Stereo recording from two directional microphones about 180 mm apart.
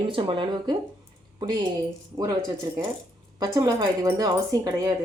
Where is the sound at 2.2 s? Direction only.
20° right (ahead or behind).